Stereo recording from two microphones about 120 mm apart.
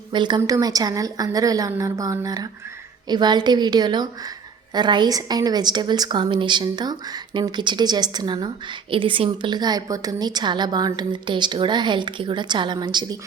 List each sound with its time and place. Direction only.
0.1 s a woman's voice: 40° right (ahead or behind)